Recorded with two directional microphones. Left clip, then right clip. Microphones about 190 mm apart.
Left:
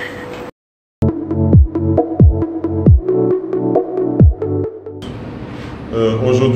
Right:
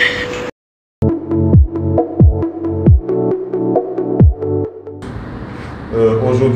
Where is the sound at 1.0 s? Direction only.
Centre (ahead or behind).